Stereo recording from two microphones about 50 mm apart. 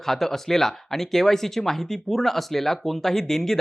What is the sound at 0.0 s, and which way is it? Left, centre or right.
Speech, centre.